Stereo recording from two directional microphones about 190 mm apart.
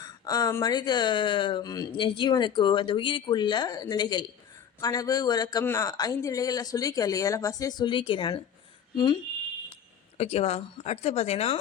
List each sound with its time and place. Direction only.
0.0 s speech: 20° left (ahead or behind)
10.2 s speech: 30° left (ahead or behind)